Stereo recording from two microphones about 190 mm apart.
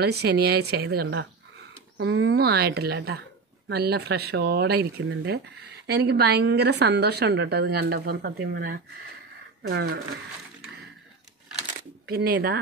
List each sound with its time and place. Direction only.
0.0 s a woman's voice: 60° right (ahead or behind)
2.0 s a woman's voice: 75° right (ahead or behind)
12.1 s a woman's voice: 60° right (ahead or behind)